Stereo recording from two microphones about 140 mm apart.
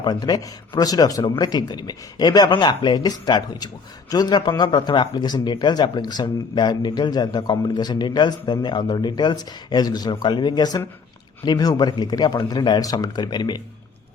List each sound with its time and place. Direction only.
0.0 s speech: 30° left (ahead or behind)